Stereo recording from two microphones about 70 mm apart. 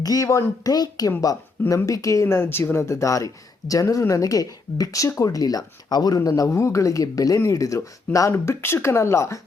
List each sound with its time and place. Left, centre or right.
0.0 s speech: left
0.7 s speech: left
1.7 s speech: left
2.2 s speech: left